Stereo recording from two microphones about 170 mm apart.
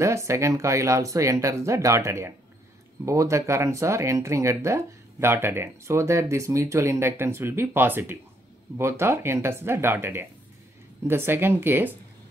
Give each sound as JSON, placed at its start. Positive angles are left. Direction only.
{"t": 0.0, "sound": "speech", "side_deg": -15}